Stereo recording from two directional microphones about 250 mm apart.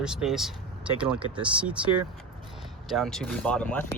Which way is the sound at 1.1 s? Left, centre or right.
Centre.